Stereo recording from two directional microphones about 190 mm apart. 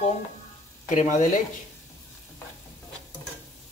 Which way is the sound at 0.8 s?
40° left (ahead or behind).